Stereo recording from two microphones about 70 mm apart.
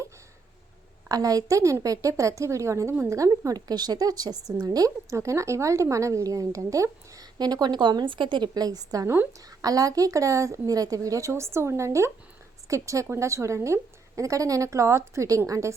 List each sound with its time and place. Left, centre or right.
1.0 s a woman's voice: right
7.3 s a woman's voice: right
11.3 s a woman's voice: right